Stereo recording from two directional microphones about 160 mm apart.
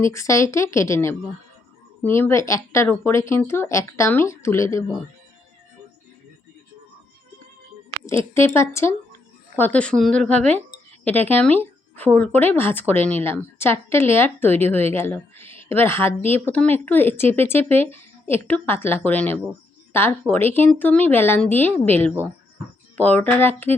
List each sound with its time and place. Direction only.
0.0 s speech: 20° left (ahead or behind)
8.0 s speech: 15° left (ahead or behind)